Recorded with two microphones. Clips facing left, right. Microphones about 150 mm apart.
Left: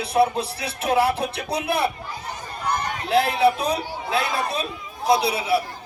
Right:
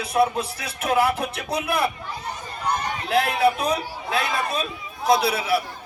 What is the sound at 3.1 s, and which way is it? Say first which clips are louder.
A man's voice: left 2 dB; 30° left (ahead or behind).